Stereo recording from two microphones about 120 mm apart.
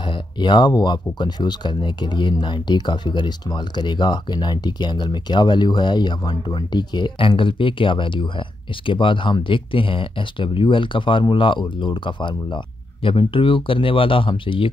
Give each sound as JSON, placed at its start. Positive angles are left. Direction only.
{"t": 0.1, "sound": "speech", "side_deg": 40}